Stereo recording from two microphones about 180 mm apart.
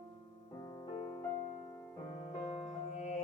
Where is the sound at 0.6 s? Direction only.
25° left (ahead or behind).